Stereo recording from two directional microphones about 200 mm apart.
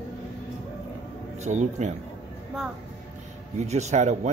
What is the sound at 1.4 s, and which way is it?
Speech, 35° right (ahead or behind).